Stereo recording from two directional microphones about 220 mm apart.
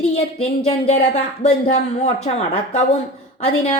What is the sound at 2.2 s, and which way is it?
Speech, 30° left (ahead or behind).